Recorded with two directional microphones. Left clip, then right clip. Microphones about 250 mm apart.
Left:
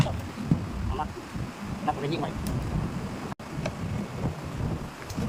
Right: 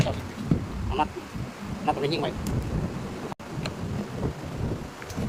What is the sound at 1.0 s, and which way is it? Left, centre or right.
Boat, right.